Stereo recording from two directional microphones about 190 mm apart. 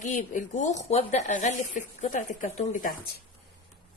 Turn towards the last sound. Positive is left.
turn(degrees=45)  # may be behind; listen again after turning